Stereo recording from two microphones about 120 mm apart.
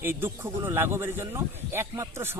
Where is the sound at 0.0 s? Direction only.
20° right (ahead or behind).